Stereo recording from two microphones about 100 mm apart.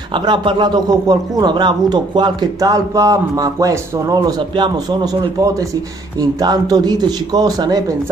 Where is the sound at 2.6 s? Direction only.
35° right (ahead or behind).